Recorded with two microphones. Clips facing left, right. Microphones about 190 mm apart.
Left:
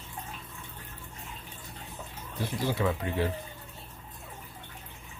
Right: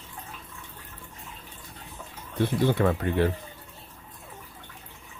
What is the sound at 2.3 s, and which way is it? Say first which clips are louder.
Speech: right 7 dB; 60° right (ahead or behind).